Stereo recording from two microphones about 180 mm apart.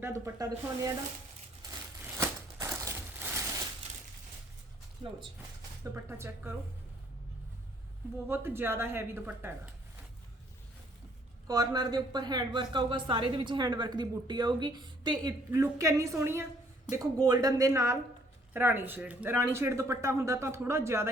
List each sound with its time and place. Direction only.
0.0 s speech: 15° right (ahead or behind)
2.1 s crushing: 15° right (ahead or behind)
5.8 s speech: 15° right (ahead or behind)
8.3 s speech: 10° right (ahead or behind)
11.4 s speech: 20° right (ahead or behind)